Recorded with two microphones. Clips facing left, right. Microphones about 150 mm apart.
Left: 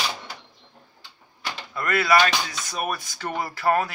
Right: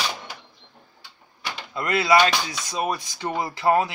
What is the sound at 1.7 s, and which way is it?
Speech, 20° right (ahead or behind).